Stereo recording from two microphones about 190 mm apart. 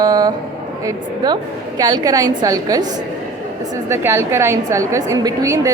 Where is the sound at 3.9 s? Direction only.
15° right (ahead or behind).